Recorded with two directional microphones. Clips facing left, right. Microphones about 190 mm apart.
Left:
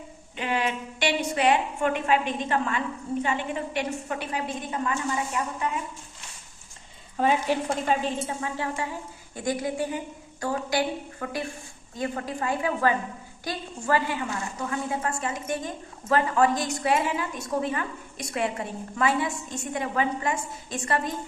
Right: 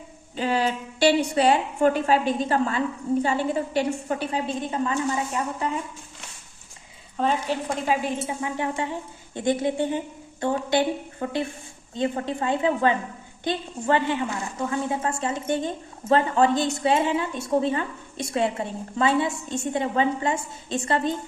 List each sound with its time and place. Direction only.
0.3 s a woman's voice: 35° right (ahead or behind)
7.2 s a woman's voice: 10° left (ahead or behind)
7.9 s a woman's voice: 15° right (ahead or behind)